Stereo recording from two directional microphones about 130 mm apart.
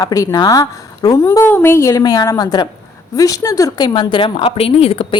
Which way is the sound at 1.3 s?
15° left (ahead or behind).